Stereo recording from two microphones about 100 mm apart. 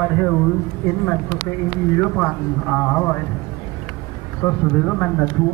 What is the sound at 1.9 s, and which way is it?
Speech, 15° left (ahead or behind).